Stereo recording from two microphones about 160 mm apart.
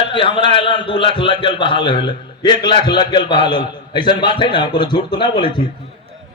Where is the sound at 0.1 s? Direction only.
30° left (ahead or behind).